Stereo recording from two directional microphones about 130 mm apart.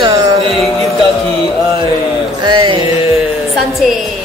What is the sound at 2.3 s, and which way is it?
Music, 35° right (ahead or behind).